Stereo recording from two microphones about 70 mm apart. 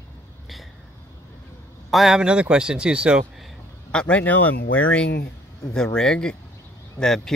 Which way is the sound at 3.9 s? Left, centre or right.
Left.